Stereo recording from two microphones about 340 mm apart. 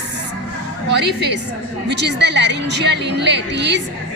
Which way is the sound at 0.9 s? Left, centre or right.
Right.